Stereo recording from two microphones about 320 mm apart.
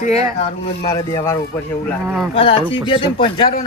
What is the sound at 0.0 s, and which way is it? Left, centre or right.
Speech, left.